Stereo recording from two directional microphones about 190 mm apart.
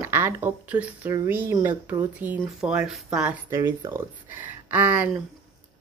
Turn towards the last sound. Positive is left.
turn(degrees=-10)  # may be behind; listen again after turning